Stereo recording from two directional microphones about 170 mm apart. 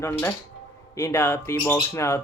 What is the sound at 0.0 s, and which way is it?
Speech, 15° left (ahead or behind).